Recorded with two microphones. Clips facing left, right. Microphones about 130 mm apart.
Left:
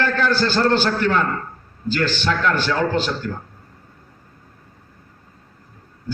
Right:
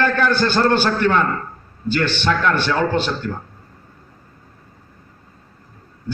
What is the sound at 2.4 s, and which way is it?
Speech, 50° right (ahead or behind).